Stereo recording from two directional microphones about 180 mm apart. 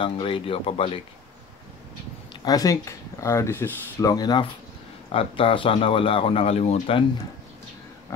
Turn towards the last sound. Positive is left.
turn(degrees=35)  # may be behind; listen again after turning